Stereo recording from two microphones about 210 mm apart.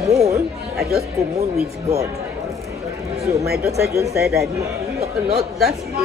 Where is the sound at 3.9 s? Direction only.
15° right (ahead or behind).